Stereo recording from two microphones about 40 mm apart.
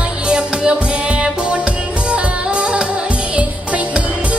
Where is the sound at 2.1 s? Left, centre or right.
Right.